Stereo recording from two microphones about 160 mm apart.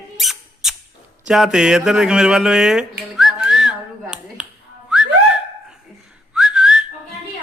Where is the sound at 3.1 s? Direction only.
5° right (ahead or behind).